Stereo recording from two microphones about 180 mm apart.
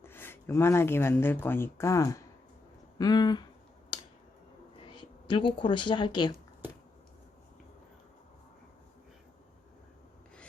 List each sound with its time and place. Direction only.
0.0 s speech: 10° left (ahead or behind)
4.8 s speech: 25° left (ahead or behind)